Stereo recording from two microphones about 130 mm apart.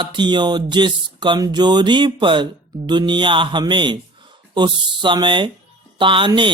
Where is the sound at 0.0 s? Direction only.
35° right (ahead or behind).